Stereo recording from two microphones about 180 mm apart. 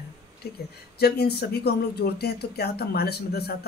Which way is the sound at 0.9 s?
60° left (ahead or behind).